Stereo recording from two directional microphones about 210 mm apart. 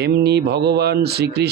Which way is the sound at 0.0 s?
50° right (ahead or behind).